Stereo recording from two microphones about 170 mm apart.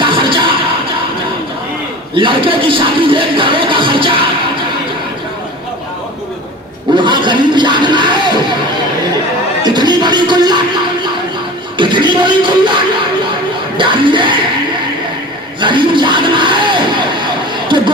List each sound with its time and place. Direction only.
0.0 s music: 30° right (ahead or behind)
2.1 s speech: 30° right (ahead or behind)
6.9 s speech: 25° right (ahead or behind)
9.6 s music: 25° right (ahead or behind)
11.8 s music: 30° right (ahead or behind)
13.7 s speech: 30° right (ahead or behind)
15.6 s speech: 30° right (ahead or behind)
17.7 s a sound: 30° right (ahead or behind)